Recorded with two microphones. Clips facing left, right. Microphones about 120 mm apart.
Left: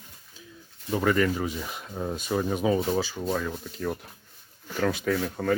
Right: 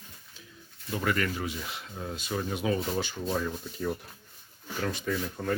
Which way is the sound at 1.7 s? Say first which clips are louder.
Left 6 dB; 45° left (ahead or behind).